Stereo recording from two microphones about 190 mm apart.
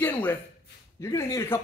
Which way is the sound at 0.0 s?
10° left (ahead or behind).